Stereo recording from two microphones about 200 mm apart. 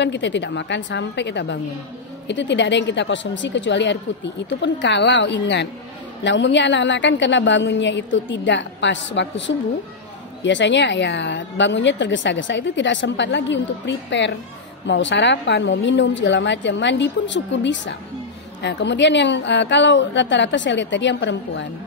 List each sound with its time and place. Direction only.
0.0 s a woman's voice: 60° left (ahead or behind)
10.4 s a woman's voice: 65° left (ahead or behind)